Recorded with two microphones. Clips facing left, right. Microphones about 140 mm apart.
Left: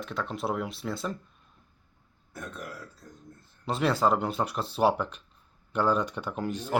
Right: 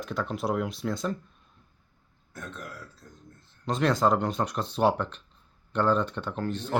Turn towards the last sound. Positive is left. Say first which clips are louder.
# even
turn(degrees=10)  # may be behind; listen again after turning